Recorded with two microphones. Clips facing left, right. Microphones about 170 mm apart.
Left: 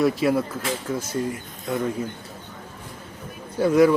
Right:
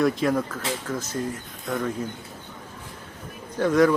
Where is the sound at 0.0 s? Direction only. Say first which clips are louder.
Left 2 dB; 5° left (ahead or behind).